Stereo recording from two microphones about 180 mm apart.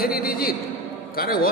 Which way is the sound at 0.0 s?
55° left (ahead or behind).